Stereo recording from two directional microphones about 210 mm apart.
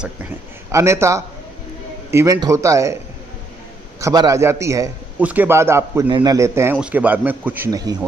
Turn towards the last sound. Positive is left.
turn(degrees=-20)  # may be behind; listen again after turning